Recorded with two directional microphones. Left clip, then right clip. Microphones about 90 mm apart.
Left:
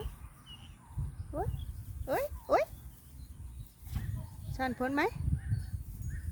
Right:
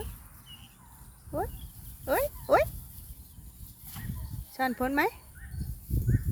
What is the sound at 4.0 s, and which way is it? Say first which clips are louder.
Livestock: right 3 dB; 5° right (ahead or behind).